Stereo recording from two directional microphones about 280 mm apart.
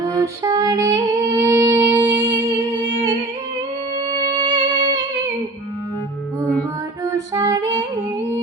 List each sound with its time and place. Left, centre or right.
0.4 s music: centre
4.1 s music: centre
7.0 s female singing: centre